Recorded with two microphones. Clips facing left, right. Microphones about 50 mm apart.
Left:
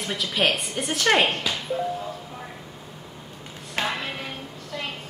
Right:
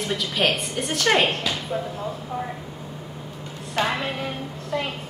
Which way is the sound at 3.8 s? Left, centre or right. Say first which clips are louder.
Right 4 dB; centre.